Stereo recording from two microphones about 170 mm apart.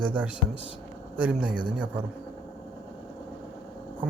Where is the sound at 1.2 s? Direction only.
5° right (ahead or behind).